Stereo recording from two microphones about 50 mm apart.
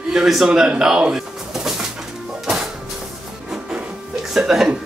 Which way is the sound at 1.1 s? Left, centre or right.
Centre.